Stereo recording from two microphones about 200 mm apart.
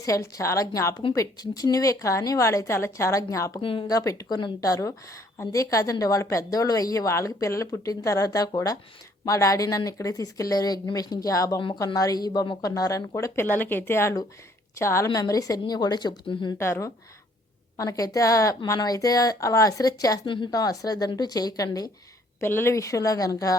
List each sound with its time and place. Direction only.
0.0 s speech: 15° left (ahead or behind)
3.6 s speech: 25° left (ahead or behind)